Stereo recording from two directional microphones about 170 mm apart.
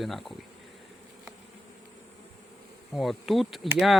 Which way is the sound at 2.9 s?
Centre (ahead or behind).